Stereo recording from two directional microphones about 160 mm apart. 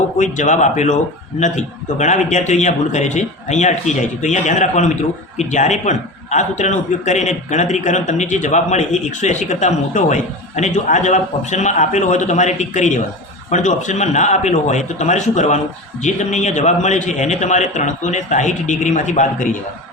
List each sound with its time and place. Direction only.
0.2 s a man's voice: 50° left (ahead or behind)